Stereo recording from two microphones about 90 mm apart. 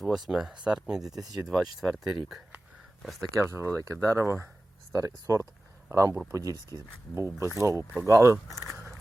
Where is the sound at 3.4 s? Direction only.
30° right (ahead or behind).